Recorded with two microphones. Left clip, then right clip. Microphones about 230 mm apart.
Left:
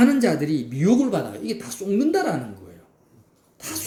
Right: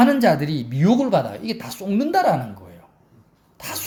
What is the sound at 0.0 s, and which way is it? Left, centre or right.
Speech, right.